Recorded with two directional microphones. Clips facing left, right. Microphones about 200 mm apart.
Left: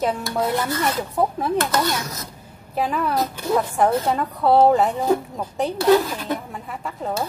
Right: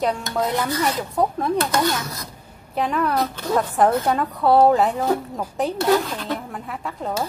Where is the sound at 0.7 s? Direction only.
15° right (ahead or behind).